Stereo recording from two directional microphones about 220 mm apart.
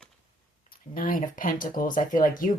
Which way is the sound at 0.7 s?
40° left (ahead or behind).